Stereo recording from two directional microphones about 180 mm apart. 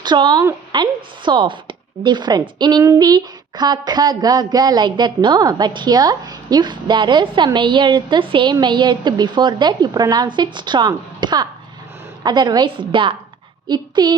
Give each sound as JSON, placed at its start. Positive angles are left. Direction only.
{"t": 0.0, "sound": "speech", "side_deg": -25}